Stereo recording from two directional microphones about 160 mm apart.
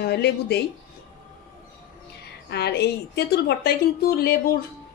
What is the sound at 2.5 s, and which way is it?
A woman's voice, 90° left.